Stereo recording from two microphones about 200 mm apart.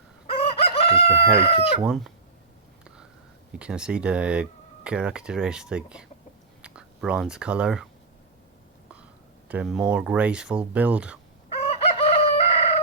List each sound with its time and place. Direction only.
0.3 s chicken: 30° left (ahead or behind)
1.4 s speech: 30° left (ahead or behind)
1.9 s speech: centre (ahead or behind)
3.5 s speech: 5° right (ahead or behind)
9.5 s speech: 5° right (ahead or behind)
11.4 s chicken: 30° left (ahead or behind)